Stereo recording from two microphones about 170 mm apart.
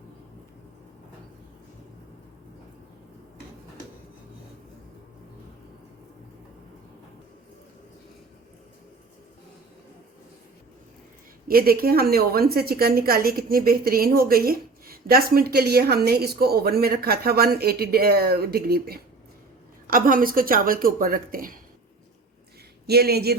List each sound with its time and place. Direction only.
11.4 s a woman's voice: 60° right (ahead or behind)
20.1 s a woman's voice: 55° right (ahead or behind)
22.9 s speech: 70° right (ahead or behind)